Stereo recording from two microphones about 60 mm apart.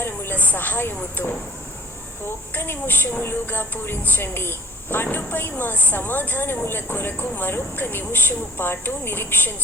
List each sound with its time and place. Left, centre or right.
0.0 s a woman's voice: left